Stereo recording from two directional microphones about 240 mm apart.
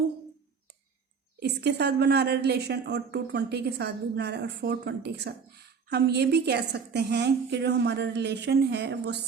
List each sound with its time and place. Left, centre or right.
1.4 s a woman's voice: right